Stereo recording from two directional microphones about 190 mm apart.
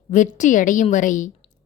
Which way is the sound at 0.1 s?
40° left (ahead or behind).